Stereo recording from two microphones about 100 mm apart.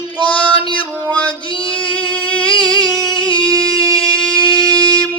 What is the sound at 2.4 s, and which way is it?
Music, 55° left (ahead or behind).